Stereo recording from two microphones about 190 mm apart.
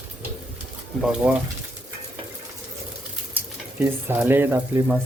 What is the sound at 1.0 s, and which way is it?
Speech, 5° right (ahead or behind).